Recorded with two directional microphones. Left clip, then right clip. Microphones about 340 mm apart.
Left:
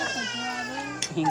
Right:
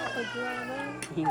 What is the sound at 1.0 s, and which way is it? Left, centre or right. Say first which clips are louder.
Tick-tock: left 5 dB; left.